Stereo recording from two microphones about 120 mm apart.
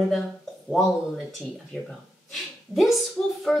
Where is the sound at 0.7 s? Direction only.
5° left (ahead or behind).